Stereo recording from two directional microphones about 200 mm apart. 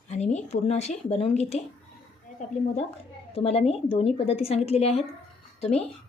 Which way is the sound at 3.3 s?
30° left (ahead or behind).